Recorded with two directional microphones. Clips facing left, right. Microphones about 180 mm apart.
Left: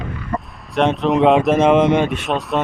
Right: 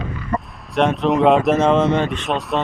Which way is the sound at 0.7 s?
Centre (ahead or behind).